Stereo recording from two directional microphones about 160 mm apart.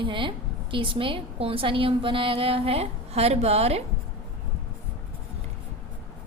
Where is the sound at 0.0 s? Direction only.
30° right (ahead or behind).